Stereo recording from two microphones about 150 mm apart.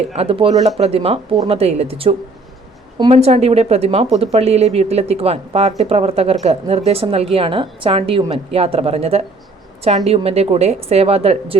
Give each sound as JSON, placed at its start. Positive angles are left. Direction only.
{"t": 0.1, "sound": "a woman's voice", "side_deg": -40}